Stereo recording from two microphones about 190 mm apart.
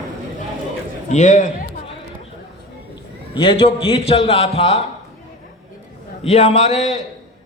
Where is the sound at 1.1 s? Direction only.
40° left (ahead or behind).